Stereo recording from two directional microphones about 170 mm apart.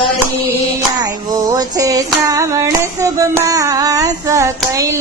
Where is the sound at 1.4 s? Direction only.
20° right (ahead or behind).